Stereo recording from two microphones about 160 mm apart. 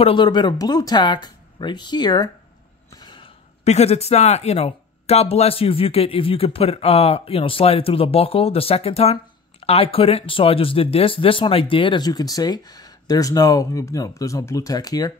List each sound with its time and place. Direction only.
0.0 s speech: 30° left (ahead or behind)
3.0 s a sound: 30° left (ahead or behind)
3.6 s speech: 45° left (ahead or behind); by 15.1 s 25° left (ahead or behind)